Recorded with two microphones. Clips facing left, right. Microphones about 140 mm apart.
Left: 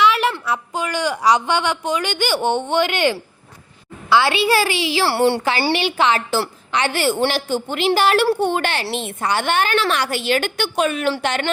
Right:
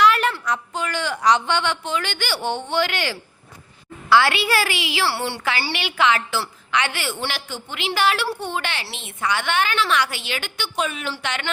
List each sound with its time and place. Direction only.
0.0 s a sound: centre (ahead or behind)
0.4 s a woman's voice: 10° left (ahead or behind); by 5.0 s 30° left (ahead or behind)
5.0 s a woman's voice: 50° left (ahead or behind)
5.7 s a woman's voice: 30° left (ahead or behind)